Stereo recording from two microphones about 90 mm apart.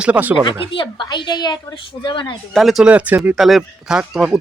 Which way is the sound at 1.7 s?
65° left (ahead or behind).